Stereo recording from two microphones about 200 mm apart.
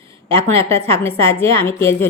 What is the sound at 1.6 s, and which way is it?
Speech, 15° left (ahead or behind).